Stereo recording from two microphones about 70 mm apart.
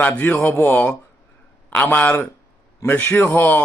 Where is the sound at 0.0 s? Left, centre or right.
Left.